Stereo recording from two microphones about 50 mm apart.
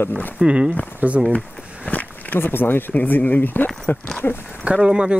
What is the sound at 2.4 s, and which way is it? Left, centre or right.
Speech, left.